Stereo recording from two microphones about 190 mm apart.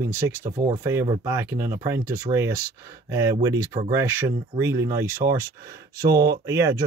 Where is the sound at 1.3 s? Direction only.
10° right (ahead or behind).